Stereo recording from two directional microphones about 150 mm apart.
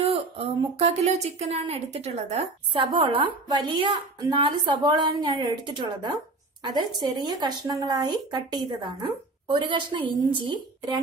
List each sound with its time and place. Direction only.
0.0 s speech: 40° right (ahead or behind)